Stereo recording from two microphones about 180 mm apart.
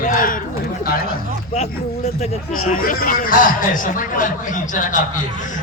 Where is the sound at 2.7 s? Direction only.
50° left (ahead or behind).